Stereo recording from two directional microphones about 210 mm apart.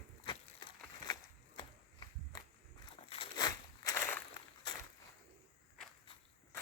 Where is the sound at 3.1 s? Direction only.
20° left (ahead or behind).